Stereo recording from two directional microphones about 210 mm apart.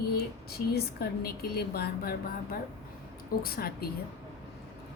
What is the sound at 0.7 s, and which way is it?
A woman's voice, 50° left (ahead or behind).